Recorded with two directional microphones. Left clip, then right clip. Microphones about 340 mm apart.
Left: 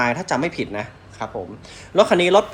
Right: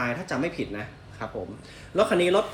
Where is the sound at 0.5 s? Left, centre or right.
Centre.